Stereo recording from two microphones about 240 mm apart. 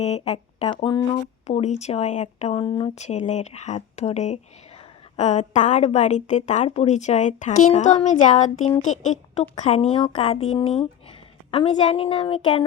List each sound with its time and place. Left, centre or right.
0.0 s a woman's voice: left